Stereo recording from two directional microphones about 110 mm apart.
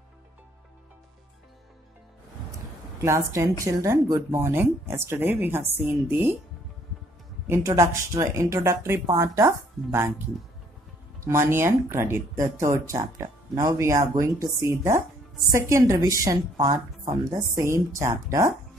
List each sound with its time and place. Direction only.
3.0 s speech: 30° right (ahead or behind)
7.4 s speech: 25° right (ahead or behind)
11.2 s speech: 25° right (ahead or behind)
17.0 s a woman's voice: 45° right (ahead or behind)
17.6 s speech: 30° right (ahead or behind)